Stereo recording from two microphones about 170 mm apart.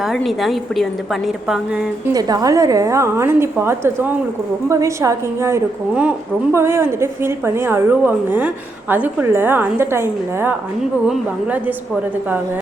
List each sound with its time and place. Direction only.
0.0 s a woman's voice: centre (ahead or behind)
2.1 s a woman's voice: 20° right (ahead or behind)